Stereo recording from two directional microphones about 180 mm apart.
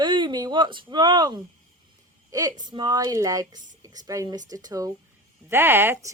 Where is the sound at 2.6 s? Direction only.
25° right (ahead or behind).